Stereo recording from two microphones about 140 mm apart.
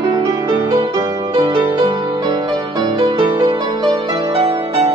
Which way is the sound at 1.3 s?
35° right (ahead or behind).